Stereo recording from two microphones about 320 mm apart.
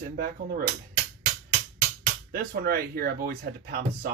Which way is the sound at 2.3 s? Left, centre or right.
Right.